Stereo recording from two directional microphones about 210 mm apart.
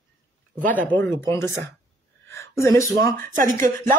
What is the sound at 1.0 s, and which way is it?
Speech, 10° left (ahead or behind).